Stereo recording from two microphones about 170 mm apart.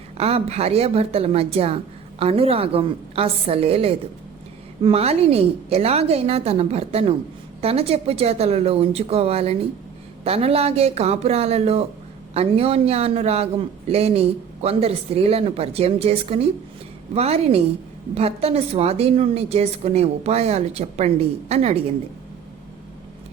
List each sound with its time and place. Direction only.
0.2 s a man's voice: 35° right (ahead or behind)